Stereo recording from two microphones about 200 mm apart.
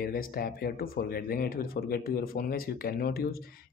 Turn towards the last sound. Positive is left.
turn(degrees=50)  # may be behind; listen again after turning